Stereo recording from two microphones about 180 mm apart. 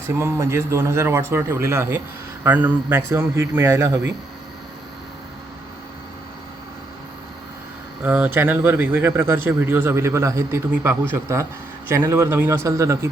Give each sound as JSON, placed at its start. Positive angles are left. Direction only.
{"t": 0.2, "sound": "speech", "side_deg": -15}
{"t": 8.0, "sound": "speech", "side_deg": -10}